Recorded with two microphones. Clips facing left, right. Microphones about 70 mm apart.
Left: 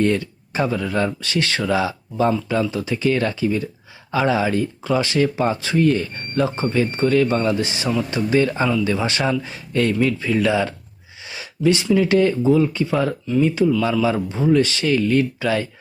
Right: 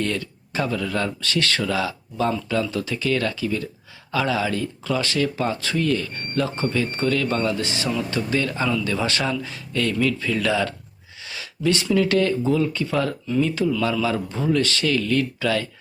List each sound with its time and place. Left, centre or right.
0.0 s speech: left
11.3 s a sound: centre
11.9 s speech: centre
13.7 s a man's voice: centre
14.0 s speech: centre